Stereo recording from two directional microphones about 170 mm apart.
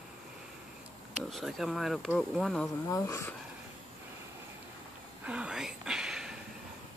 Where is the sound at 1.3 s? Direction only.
Centre (ahead or behind).